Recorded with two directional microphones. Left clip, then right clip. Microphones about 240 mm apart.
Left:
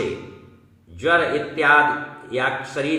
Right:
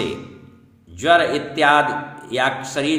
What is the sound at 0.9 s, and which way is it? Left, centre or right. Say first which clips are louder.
A man's voice: right 3 dB; right.